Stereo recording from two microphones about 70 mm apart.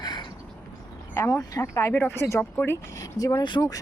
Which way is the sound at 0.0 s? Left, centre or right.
Left.